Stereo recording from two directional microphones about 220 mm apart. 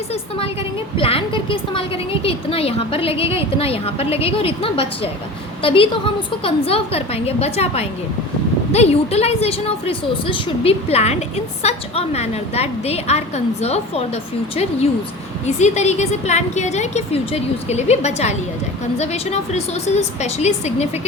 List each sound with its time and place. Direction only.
0.1 s a woman's voice: 25° left (ahead or behind)
15.4 s a woman's voice: 30° left (ahead or behind)